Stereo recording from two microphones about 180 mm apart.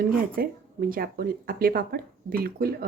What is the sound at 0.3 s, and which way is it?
Speech, 55° right (ahead or behind).